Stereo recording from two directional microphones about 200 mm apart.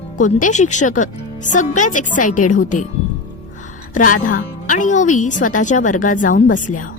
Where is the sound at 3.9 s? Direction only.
45° left (ahead or behind).